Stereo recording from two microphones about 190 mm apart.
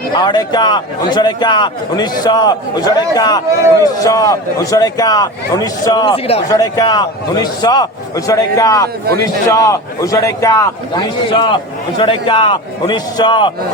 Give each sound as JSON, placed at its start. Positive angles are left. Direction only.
{"t": 0.1, "sound": "a man's voice", "side_deg": 25}
{"t": 6.5, "sound": "a man's voice", "side_deg": 20}